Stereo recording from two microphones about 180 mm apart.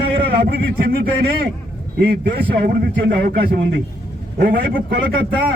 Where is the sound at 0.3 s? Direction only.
60° right (ahead or behind).